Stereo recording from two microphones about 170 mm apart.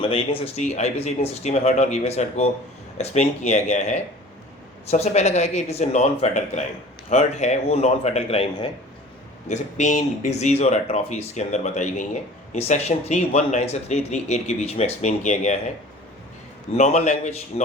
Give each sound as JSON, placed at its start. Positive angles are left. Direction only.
{"t": 0.0, "sound": "speech", "side_deg": 30}
{"t": 16.7, "sound": "a man's voice", "side_deg": 45}